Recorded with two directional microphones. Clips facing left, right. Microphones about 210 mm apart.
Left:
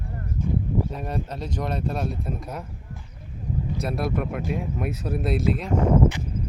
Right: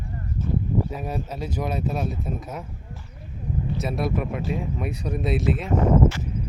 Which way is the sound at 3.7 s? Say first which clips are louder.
Right 1 dB; centre (ahead or behind).